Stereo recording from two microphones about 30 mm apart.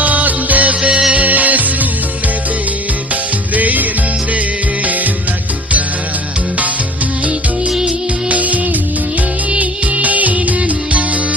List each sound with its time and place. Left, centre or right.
0.0 s music: right
0.8 s music: right
1.1 s music: right
3.5 s music: right
8.3 s music: right
9.6 s music: right